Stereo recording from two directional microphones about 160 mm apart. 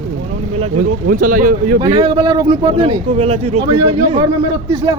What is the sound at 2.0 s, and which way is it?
Speech, 30° right (ahead or behind).